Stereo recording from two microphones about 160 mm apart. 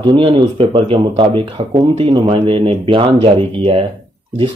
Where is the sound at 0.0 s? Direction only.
30° right (ahead or behind).